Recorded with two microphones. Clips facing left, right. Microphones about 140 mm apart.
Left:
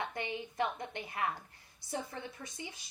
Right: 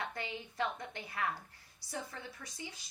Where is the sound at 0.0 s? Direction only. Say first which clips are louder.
Left 3 dB; 20° left (ahead or behind).